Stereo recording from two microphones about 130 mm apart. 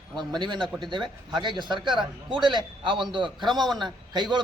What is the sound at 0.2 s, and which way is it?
A man's voice, 35° right (ahead or behind).